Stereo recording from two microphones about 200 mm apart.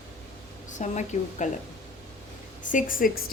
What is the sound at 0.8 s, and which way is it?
Speech, 35° left (ahead or behind).